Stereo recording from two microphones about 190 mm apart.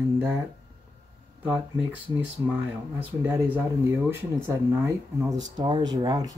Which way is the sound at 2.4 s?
10° right (ahead or behind).